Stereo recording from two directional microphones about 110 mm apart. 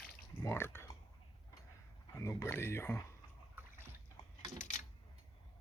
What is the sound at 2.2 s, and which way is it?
Speech, 25° left (ahead or behind).